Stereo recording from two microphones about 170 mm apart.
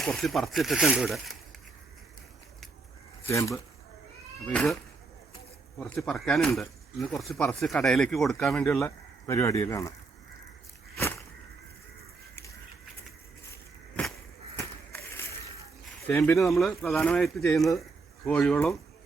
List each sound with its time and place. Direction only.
0.0 s speech: centre (ahead or behind)
3.2 s speech: 15° left (ahead or behind)
4.4 s speech: 5° left (ahead or behind)
5.9 s speech: 5° left (ahead or behind)
14.6 s a sound: 15° left (ahead or behind)
16.0 s speech: 10° left (ahead or behind)
16.4 s speech: centre (ahead or behind)